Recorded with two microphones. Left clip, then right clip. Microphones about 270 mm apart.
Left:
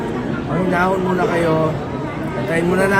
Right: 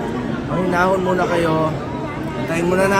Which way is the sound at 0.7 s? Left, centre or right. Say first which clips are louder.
Right 1 dB; centre.